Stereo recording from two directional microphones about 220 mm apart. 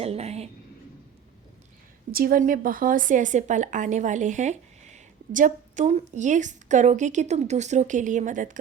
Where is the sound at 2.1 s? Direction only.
40° right (ahead or behind).